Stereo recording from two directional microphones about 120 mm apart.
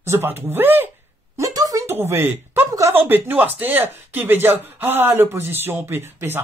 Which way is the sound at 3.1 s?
15° right (ahead or behind).